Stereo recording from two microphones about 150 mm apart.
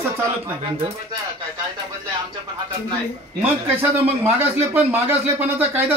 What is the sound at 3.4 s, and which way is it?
A man's voice, 15° right (ahead or behind).